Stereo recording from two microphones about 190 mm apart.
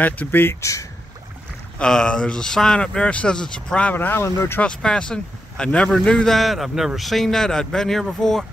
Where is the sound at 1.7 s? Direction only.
5° left (ahead or behind).